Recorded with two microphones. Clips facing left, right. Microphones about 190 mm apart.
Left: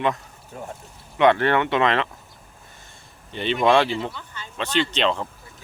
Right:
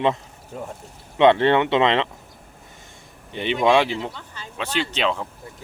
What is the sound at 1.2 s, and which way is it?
Speech, 25° right (ahead or behind).